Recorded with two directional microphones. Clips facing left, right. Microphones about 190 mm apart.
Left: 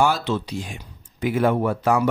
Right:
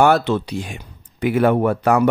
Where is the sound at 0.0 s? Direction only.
60° right (ahead or behind).